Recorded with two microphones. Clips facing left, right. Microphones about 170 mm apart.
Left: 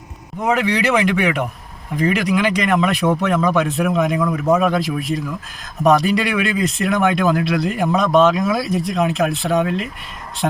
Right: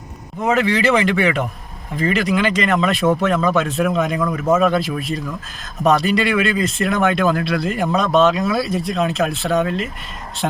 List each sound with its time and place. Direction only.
0.4 s speech: 15° left (ahead or behind)
4.2 s a man's voice: centre (ahead or behind)
4.5 s speech: 15° left (ahead or behind)